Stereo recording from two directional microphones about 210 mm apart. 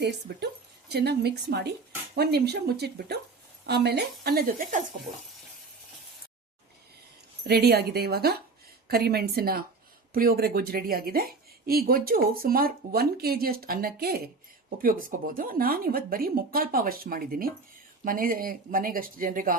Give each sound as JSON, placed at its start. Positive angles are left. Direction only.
{"t": 0.9, "sound": "a woman's voice", "side_deg": -50}
{"t": 7.4, "sound": "a woman's voice", "side_deg": -50}
{"t": 15.4, "sound": "a woman's voice", "side_deg": -45}